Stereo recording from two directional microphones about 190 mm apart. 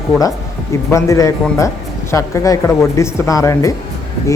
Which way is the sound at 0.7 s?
15° left (ahead or behind).